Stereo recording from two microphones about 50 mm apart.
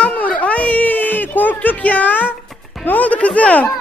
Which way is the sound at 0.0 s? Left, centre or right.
Left.